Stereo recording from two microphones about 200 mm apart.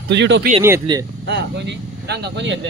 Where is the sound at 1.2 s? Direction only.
60° right (ahead or behind).